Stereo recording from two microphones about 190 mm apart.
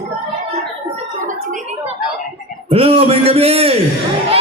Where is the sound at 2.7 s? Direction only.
30° right (ahead or behind).